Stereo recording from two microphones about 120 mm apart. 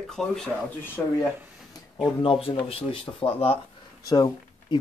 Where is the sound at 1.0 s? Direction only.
15° left (ahead or behind).